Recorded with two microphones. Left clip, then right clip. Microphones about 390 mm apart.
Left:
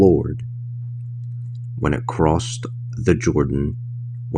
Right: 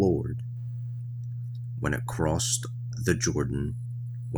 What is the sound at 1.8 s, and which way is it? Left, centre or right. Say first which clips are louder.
Speech: left 10 dB; right.